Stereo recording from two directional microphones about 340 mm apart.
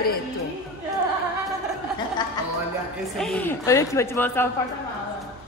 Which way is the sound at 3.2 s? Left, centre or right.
Centre.